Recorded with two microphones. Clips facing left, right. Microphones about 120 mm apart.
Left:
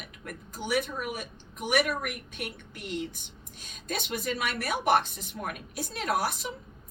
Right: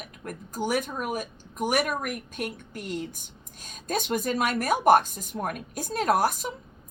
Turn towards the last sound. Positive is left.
turn(degrees=-45)  # may be behind; listen again after turning